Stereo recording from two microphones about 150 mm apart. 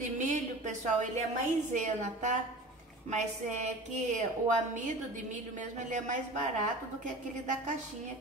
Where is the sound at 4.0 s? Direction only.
55° right (ahead or behind).